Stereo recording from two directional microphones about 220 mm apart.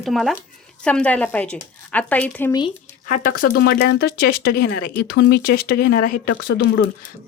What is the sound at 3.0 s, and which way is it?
Speech, 40° left (ahead or behind).